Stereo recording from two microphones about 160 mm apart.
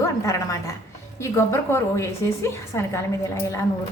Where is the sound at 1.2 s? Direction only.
15° left (ahead or behind).